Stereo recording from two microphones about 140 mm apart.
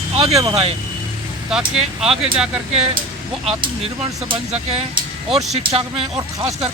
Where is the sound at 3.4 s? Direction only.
45° right (ahead or behind).